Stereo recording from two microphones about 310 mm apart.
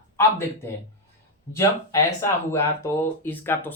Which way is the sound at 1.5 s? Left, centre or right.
Centre.